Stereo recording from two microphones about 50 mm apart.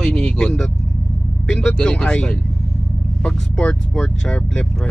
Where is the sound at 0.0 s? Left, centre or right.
Centre.